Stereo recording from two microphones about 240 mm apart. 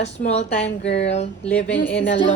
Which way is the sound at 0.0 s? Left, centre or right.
Left.